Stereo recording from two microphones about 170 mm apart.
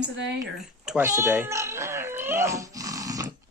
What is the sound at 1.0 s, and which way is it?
Cat, 15° right (ahead or behind).